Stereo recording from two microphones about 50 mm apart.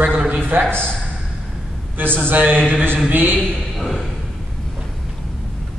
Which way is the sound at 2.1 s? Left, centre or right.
Right.